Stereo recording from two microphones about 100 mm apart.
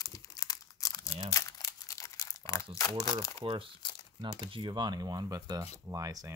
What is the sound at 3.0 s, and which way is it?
Speech, 35° left (ahead or behind).